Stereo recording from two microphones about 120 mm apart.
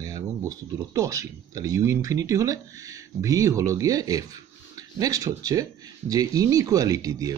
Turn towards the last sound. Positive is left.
turn(degrees=-30)  # may be behind; listen again after turning